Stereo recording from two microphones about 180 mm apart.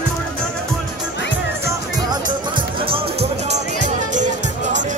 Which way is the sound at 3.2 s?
35° right (ahead or behind).